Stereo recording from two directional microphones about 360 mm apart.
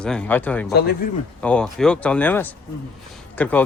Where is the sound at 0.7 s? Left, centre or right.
Left.